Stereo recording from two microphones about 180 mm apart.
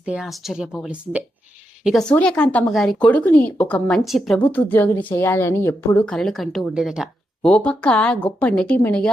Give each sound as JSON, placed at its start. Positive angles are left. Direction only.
{"t": 0.0, "sound": "speech", "side_deg": -5}